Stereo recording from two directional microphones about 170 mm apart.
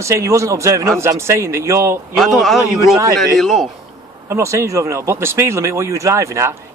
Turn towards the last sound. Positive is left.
turn(degrees=-15)  # may be behind; listen again after turning